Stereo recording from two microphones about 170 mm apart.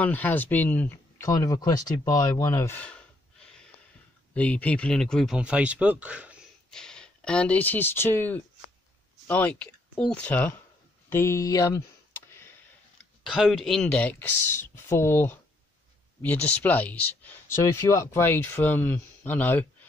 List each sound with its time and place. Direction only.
0.0 s speech: 10° left (ahead or behind); by 6.4 s 5° right (ahead or behind)
6.7 s speech: 5° left (ahead or behind); by 11.8 s 20° left (ahead or behind)
13.2 s speech: centre (ahead or behind); by 15.3 s 15° left (ahead or behind)
16.5 s speech: 10° left (ahead or behind)